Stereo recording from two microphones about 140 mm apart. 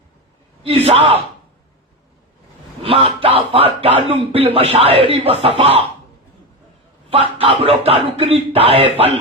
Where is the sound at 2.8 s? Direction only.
40° right (ahead or behind).